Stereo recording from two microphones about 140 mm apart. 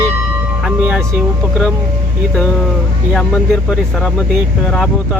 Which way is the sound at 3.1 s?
5° left (ahead or behind).